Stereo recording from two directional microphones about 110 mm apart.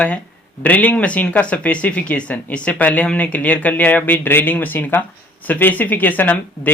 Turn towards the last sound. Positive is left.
turn(degrees=15)  # may be behind; listen again after turning